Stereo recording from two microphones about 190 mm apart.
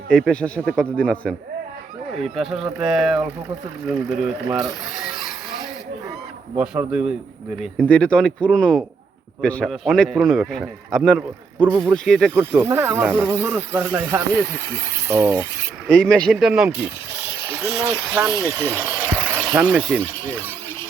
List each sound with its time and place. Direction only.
0.1 s a man's voice: 5° left (ahead or behind)
6.6 s a man's voice: 5° right (ahead or behind)
7.6 s a man's voice: 5° left (ahead or behind)
11.6 s speech: 20° right (ahead or behind)
12.0 s a man's voice: 5° left (ahead or behind)
12.3 s speech: 10° right (ahead or behind)
16.0 s a man's voice: 5° left (ahead or behind); by 18.4 s 15° right (ahead or behind)
18.4 s a sound: 10° right (ahead or behind)
19.5 s speech: 5° right (ahead or behind)